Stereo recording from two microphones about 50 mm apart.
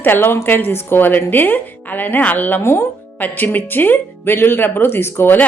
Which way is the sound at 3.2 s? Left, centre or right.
Left.